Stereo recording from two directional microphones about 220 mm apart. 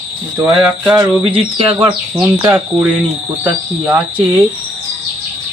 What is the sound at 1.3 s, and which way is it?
Speech, 20° right (ahead or behind).